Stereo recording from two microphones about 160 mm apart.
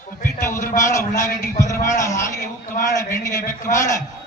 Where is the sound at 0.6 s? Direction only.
55° left (ahead or behind).